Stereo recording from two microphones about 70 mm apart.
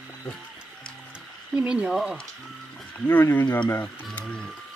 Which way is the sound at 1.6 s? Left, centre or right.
Centre.